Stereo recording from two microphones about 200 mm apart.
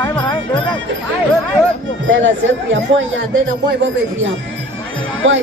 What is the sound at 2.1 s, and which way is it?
Speech, 70° right (ahead or behind).